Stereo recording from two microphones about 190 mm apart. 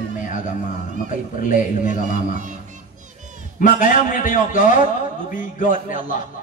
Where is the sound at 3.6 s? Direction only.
45° left (ahead or behind).